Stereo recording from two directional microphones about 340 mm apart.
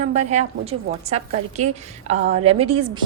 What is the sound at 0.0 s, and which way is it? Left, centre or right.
A woman's voice, centre.